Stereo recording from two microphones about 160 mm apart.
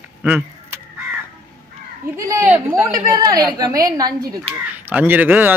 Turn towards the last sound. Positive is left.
turn(degrees=-10)  # may be behind; listen again after turning